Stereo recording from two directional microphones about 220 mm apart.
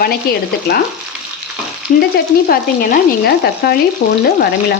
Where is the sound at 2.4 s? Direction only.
40° left (ahead or behind).